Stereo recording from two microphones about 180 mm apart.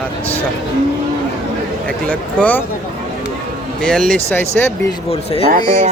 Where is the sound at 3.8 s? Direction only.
5° left (ahead or behind).